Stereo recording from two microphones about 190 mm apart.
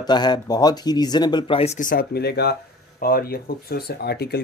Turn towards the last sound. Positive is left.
turn(degrees=60)  # may be behind; listen again after turning